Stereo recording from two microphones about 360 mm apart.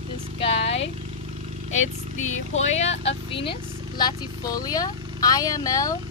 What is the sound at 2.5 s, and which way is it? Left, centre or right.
Speech, centre.